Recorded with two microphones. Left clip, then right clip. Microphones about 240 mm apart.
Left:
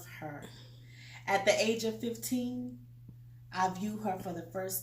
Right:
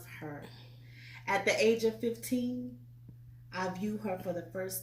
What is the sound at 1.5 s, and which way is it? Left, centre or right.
Speech, centre.